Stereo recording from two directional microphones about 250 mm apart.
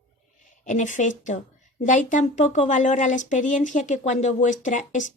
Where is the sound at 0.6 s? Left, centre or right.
Left.